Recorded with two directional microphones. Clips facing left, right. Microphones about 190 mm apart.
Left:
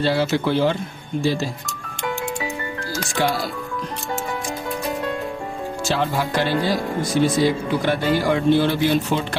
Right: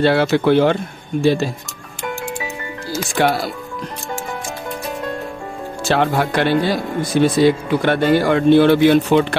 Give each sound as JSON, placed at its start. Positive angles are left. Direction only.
{"t": 0.0, "sound": "speech", "side_deg": -65}
{"t": 3.2, "sound": "speech", "side_deg": -60}
{"t": 5.9, "sound": "speech", "side_deg": -65}